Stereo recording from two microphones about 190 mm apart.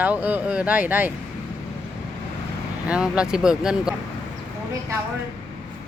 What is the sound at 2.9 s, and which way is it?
Speech, 5° right (ahead or behind).